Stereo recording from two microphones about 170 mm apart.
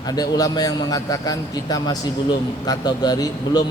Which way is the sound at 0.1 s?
20° left (ahead or behind).